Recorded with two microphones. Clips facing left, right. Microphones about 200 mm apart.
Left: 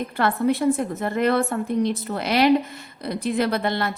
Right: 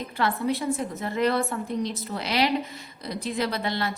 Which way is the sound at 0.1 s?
55° left (ahead or behind).